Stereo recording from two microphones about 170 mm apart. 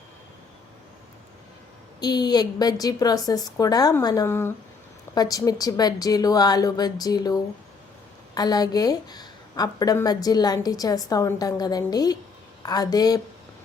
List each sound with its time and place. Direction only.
2.0 s a woman's voice: 25° left (ahead or behind)